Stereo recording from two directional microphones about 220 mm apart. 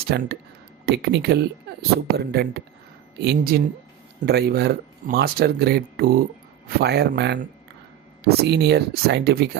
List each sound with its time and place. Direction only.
0.0 s speech: 45° right (ahead or behind)